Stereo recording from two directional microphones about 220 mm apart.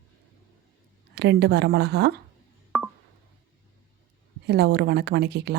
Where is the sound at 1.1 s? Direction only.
50° right (ahead or behind).